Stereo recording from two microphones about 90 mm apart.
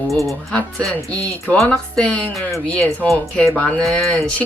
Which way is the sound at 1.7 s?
10° left (ahead or behind).